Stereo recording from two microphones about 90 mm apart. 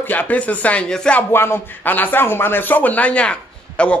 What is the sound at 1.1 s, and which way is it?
Speech, 25° left (ahead or behind).